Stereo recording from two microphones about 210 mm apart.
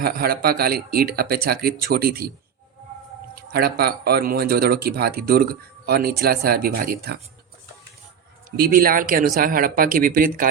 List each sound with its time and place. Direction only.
0.0 s speech: 45° right (ahead or behind)
3.5 s speech: 50° right (ahead or behind)
8.4 s speech: 45° right (ahead or behind)